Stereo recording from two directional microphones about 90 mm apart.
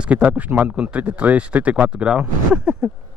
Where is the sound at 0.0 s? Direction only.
15° right (ahead or behind).